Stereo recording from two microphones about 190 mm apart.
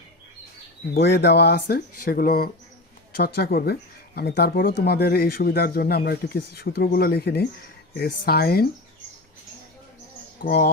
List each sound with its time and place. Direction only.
0.9 s speech: 60° left (ahead or behind)
10.3 s speech: 50° left (ahead or behind)